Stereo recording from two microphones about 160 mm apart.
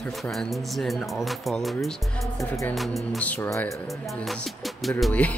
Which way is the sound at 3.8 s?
Centre (ahead or behind).